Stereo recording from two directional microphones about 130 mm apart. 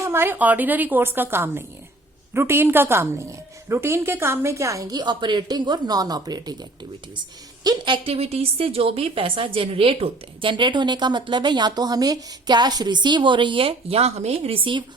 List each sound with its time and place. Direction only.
0.0 s a woman's voice: 20° right (ahead or behind)
8.0 s a woman's voice: 50° right (ahead or behind)